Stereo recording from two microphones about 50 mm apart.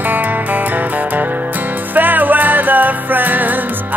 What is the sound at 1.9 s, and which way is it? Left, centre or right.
Music, right.